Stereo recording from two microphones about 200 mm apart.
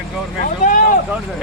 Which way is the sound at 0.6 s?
40° left (ahead or behind).